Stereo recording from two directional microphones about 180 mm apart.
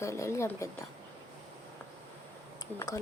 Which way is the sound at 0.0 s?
15° left (ahead or behind).